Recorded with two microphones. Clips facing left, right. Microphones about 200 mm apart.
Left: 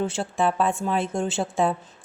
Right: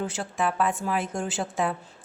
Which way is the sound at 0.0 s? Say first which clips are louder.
Left 4 dB; 30° left (ahead or behind).